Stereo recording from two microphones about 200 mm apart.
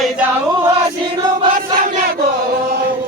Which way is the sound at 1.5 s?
45° right (ahead or behind).